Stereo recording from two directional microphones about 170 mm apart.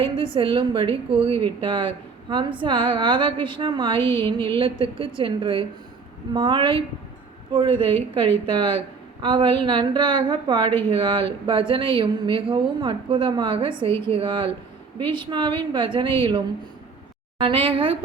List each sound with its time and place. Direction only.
0.0 s a woman's voice: 30° right (ahead or behind)